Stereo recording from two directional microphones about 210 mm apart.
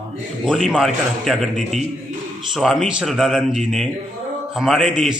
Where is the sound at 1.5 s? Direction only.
35° right (ahead or behind).